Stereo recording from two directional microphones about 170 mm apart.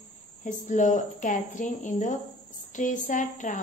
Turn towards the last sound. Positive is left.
turn(degrees=50)  # may be behind; listen again after turning